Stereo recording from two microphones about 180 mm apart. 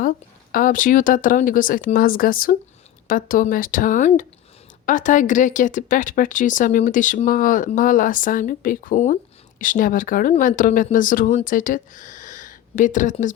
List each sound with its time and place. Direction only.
0.5 s a woman's voice: 50° left (ahead or behind)